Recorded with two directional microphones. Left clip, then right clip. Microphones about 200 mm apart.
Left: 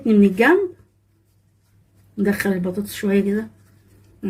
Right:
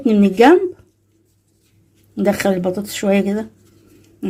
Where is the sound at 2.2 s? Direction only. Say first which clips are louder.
Right 6 dB; 50° right (ahead or behind).